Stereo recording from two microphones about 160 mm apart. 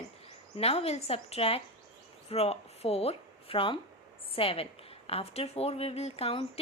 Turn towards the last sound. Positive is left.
turn(degrees=40)  # may be behind; listen again after turning